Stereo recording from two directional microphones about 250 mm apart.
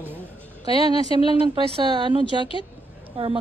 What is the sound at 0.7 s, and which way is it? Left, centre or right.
Speech, left.